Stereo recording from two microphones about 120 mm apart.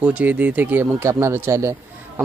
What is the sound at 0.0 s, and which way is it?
Speech, 10° right (ahead or behind).